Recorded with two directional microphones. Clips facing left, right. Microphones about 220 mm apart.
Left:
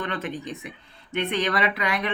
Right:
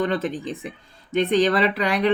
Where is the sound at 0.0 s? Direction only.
40° right (ahead or behind).